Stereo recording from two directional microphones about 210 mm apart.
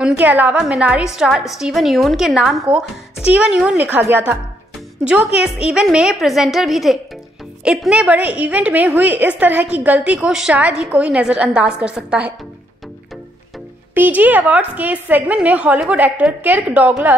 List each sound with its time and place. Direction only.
0.0 s a woman's voice: 5° right (ahead or behind)
13.9 s a woman's voice: 10° right (ahead or behind)